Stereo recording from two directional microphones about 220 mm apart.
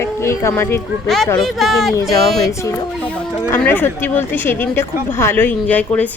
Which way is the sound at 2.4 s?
15° left (ahead or behind).